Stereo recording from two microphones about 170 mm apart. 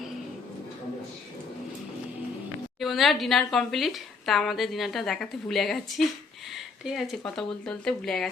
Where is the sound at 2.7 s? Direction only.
Centre (ahead or behind).